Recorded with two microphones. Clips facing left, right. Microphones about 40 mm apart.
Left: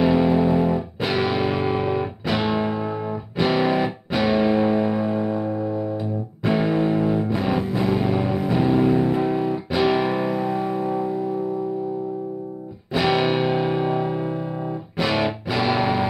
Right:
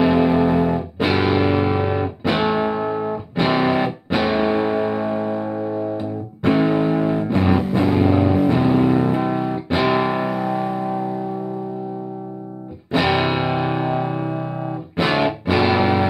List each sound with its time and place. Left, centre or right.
0.0 s music: right
10.2 s music: centre
12.9 s music: right